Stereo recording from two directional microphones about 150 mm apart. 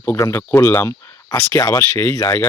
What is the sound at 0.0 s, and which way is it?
Speech, 15° left (ahead or behind).